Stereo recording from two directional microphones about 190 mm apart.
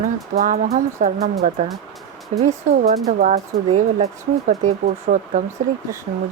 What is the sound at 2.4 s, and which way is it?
Speech, 35° right (ahead or behind).